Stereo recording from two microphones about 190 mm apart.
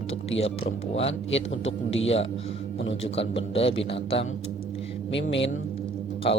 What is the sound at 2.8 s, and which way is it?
Speech, 75° left (ahead or behind).